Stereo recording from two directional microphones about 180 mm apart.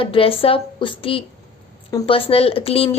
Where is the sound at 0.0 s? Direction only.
30° left (ahead or behind).